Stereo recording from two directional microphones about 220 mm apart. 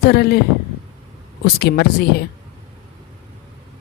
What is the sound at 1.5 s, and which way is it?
Speech, 45° left (ahead or behind).